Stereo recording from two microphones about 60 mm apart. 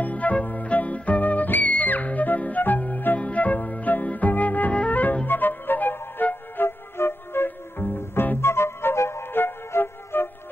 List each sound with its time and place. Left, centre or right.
0.0 s music: left
3.2 s flute: left